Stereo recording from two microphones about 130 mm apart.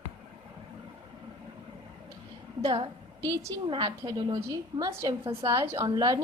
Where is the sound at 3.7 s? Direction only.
35° right (ahead or behind).